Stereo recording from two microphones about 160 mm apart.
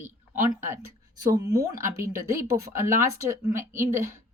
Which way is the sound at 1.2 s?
25° right (ahead or behind).